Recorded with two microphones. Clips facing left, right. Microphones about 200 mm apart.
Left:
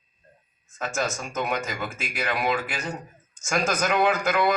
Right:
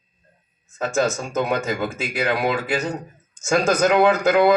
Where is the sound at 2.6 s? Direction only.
65° right (ahead or behind).